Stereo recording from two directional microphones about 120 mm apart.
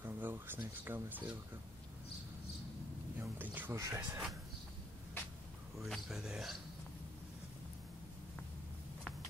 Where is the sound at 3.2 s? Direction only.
15° right (ahead or behind).